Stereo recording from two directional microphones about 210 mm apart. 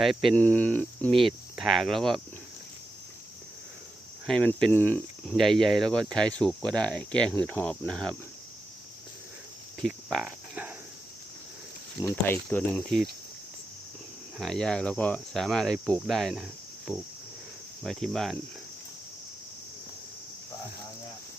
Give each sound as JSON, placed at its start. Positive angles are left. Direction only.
{"t": 0.0, "sound": "speech", "side_deg": 0}
{"t": 4.3, "sound": "speech", "side_deg": 5}
{"t": 9.8, "sound": "cricket", "side_deg": 0}
{"t": 12.0, "sound": "speech", "side_deg": 10}
{"t": 14.3, "sound": "speech", "side_deg": 0}